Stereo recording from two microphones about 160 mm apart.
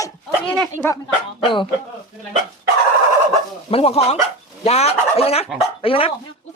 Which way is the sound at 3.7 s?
40° left (ahead or behind).